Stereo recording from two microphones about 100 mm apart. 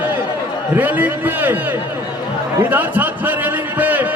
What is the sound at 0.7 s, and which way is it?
Speech, 20° right (ahead or behind).